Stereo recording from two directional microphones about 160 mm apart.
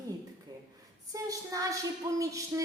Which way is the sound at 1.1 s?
20° right (ahead or behind).